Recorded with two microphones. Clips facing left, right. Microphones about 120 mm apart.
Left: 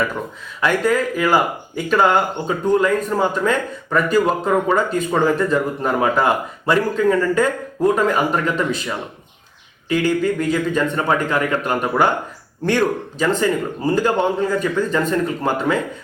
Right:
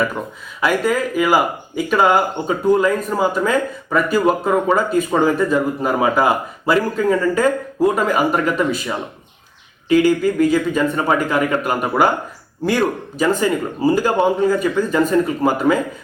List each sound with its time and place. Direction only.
0.6 s speech: 5° right (ahead or behind)